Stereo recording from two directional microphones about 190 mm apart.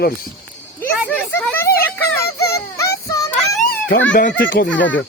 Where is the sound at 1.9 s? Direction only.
15° left (ahead or behind).